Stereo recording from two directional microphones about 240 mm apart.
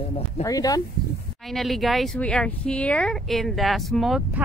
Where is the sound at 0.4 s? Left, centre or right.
Centre.